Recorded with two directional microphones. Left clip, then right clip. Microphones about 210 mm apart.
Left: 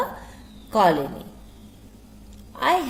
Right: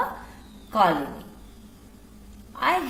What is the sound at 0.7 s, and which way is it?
Speech, 45° left (ahead or behind).